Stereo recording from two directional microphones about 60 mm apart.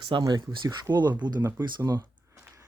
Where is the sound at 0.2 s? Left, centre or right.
Right.